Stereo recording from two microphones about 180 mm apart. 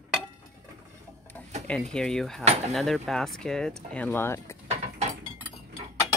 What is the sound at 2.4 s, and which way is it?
Speech, 40° right (ahead or behind).